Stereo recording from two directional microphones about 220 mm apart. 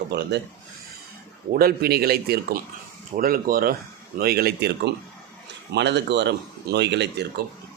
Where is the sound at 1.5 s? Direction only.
40° right (ahead or behind).